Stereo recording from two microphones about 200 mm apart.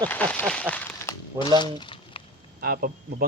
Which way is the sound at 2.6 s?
50° right (ahead or behind).